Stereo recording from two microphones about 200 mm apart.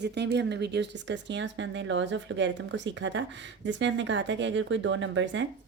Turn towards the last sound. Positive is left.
turn(degrees=-65)  # may be behind; listen again after turning